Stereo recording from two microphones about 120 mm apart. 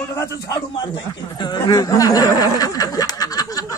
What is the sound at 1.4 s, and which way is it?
A man's voice, 35° left (ahead or behind).